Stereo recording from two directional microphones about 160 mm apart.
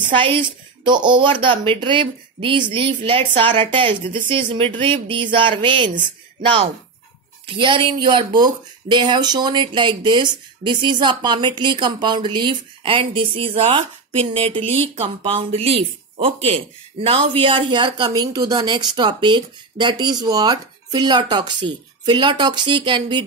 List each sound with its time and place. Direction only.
0.1 s speech: 30° right (ahead or behind)